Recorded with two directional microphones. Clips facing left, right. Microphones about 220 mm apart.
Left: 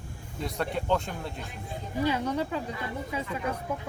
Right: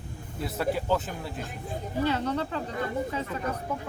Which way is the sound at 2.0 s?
10° left (ahead or behind).